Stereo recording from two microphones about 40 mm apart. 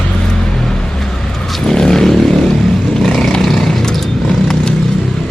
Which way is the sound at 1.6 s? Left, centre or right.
Centre.